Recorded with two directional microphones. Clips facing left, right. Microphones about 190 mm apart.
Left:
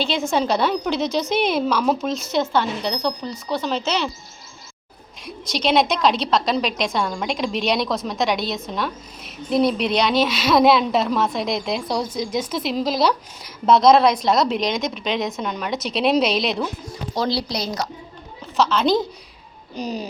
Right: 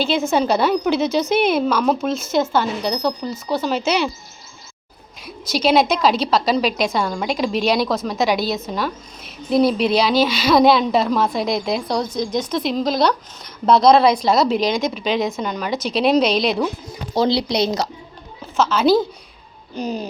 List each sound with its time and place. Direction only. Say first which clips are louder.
0.0 s a woman's voice: right 3 dB; 5° right (ahead or behind)
5.2 s a woman's voice: right 4 dB; 5° right (ahead or behind)
16.9 s speech: right 5 dB; 25° right (ahead or behind)
18.5 s a woman's voice: right 3 dB; 5° right (ahead or behind)